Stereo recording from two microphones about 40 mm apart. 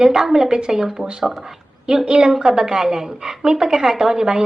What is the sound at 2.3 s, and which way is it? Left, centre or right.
Speech, centre.